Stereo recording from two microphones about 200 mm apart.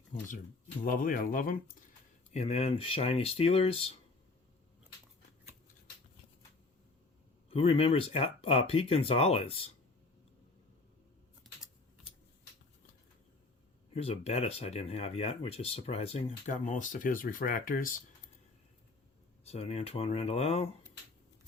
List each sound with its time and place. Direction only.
0.8 s speech: 45° left (ahead or behind)
2.3 s speech: 35° left (ahead or behind)
7.5 s speech: 30° left (ahead or behind)
13.9 s speech: 30° left (ahead or behind)
19.5 s speech: 30° left (ahead or behind)